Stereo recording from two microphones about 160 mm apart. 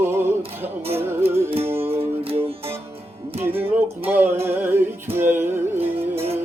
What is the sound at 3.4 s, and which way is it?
Music, 15° right (ahead or behind).